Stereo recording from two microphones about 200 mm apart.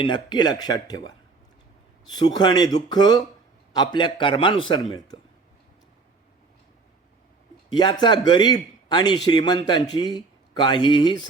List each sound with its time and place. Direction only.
0.0 s a man's voice: 20° left (ahead or behind)
7.7 s a man's voice: 20° left (ahead or behind)